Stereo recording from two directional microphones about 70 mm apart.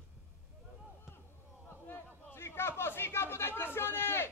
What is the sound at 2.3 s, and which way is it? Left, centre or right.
A man's voice, left.